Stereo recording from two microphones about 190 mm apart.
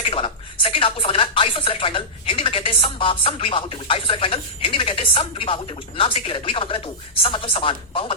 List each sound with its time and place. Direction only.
0.0 s speech: 30° left (ahead or behind)